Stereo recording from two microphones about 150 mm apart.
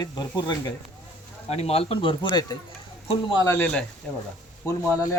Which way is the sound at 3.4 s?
15° left (ahead or behind).